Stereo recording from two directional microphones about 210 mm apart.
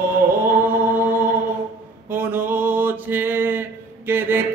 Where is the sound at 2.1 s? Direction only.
10° right (ahead or behind).